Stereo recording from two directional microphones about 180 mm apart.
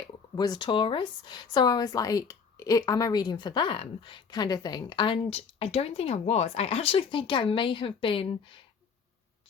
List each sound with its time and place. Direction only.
0.3 s a woman's voice: 20° left (ahead or behind)